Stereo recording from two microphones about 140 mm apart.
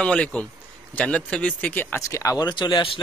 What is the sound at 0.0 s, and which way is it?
A man's voice, 5° left (ahead or behind).